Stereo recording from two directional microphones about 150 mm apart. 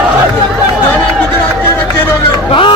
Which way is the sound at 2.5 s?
35° left (ahead or behind).